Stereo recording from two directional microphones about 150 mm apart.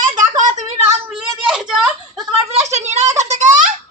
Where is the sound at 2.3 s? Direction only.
45° right (ahead or behind).